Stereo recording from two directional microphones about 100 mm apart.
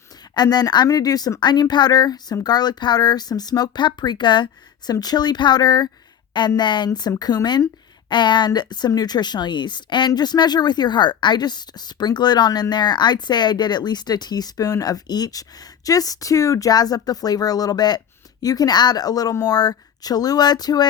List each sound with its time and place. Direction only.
0.3 s a woman's voice: 40° left (ahead or behind)